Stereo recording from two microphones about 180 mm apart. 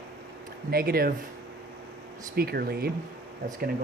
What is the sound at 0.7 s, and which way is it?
Speech, 55° right (ahead or behind).